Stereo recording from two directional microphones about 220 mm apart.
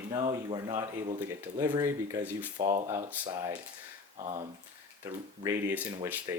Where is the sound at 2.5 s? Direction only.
25° right (ahead or behind).